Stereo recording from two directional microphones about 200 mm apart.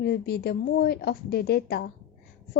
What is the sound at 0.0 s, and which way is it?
A woman's voice, 55° left (ahead or behind).